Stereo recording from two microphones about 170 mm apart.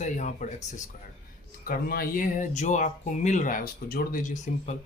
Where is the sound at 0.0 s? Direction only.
45° left (ahead or behind).